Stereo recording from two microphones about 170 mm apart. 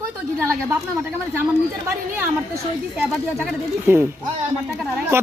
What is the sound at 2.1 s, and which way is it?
Speech, 10° right (ahead or behind).